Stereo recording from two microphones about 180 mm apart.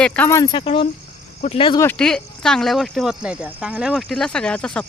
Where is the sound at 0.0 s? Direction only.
10° left (ahead or behind); by 1.8 s 30° left (ahead or behind).